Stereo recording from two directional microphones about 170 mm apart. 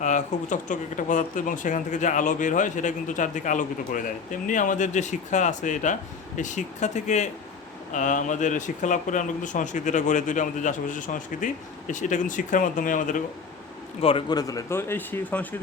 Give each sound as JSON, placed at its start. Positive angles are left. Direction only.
{"t": 0.0, "sound": "speech", "side_deg": 45}
{"t": 14.0, "sound": "speech", "side_deg": 30}